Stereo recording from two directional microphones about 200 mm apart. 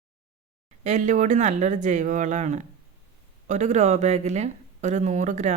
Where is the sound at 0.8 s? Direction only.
35° right (ahead or behind).